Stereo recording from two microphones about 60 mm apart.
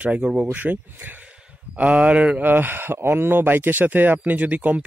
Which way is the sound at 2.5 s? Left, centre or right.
Right.